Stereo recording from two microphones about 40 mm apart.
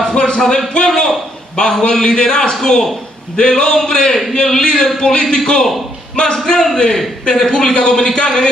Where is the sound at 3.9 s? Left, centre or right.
Left.